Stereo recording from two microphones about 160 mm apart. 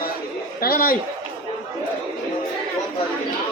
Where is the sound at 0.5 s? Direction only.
70° left (ahead or behind).